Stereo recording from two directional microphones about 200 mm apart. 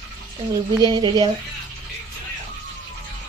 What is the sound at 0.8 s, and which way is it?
Speech, 20° right (ahead or behind).